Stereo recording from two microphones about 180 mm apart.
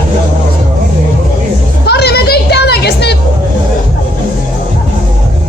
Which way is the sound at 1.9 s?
65° left (ahead or behind).